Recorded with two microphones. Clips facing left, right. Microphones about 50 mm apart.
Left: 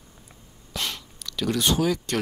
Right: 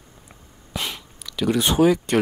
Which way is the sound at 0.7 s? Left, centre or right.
Centre.